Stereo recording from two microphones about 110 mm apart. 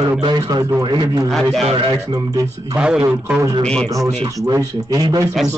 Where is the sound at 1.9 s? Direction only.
35° right (ahead or behind).